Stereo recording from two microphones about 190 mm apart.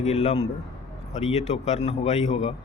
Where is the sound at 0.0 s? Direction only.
35° left (ahead or behind).